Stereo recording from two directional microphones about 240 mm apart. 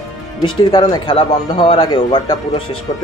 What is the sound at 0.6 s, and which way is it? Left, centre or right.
Speech, centre.